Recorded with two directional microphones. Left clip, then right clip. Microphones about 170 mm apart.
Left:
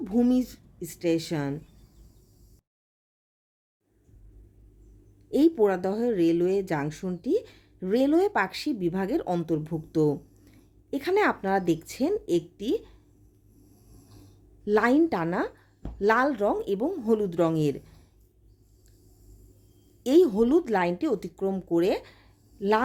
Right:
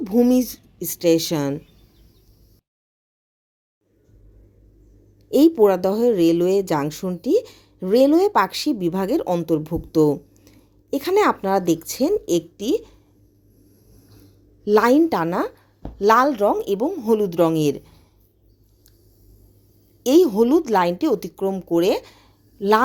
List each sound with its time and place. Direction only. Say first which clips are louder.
0.0 s a woman's voice: right 8 dB; 10° right (ahead or behind)
5.3 s speech: right 7 dB; 10° right (ahead or behind)
14.6 s speech: right 7 dB; 10° right (ahead or behind)
20.0 s speech: right 5 dB; 5° right (ahead or behind)